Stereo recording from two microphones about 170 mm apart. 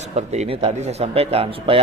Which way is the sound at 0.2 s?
40° right (ahead or behind).